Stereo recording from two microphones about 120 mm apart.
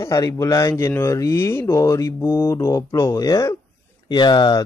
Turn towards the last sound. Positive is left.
turn(degrees=40)  # may be behind; listen again after turning